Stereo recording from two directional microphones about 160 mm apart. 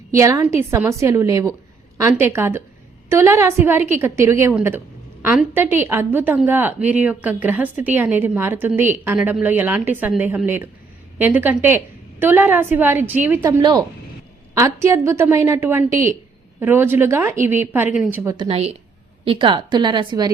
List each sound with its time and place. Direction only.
0.1 s a woman's voice: 20° right (ahead or behind)
18.3 s a woman's voice: 40° right (ahead or behind)